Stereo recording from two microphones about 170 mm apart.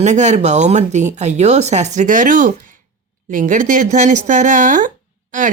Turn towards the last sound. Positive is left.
turn(degrees=-50)  # may be behind; listen again after turning